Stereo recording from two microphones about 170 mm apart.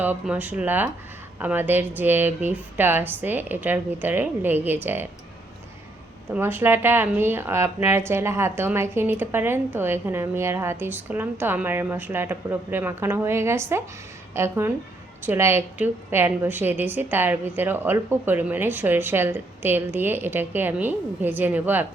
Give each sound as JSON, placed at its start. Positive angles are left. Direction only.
{"t": 0.0, "sound": "speech", "side_deg": -10}
{"t": 6.3, "sound": "speech", "side_deg": -10}